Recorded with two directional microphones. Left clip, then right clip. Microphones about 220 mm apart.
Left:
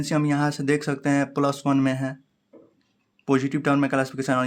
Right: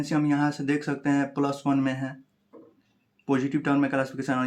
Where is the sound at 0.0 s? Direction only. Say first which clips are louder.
Left 1 dB; 45° left (ahead or behind).